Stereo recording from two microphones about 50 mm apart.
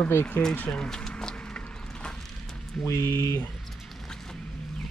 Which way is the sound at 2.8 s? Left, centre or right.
Left.